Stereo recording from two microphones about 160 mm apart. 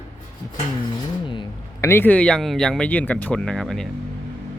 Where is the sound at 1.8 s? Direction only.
15° left (ahead or behind).